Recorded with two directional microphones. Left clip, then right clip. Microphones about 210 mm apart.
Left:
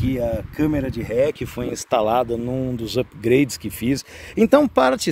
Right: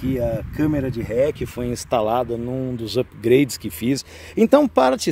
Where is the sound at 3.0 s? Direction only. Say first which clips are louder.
Right 1 dB; centre (ahead or behind).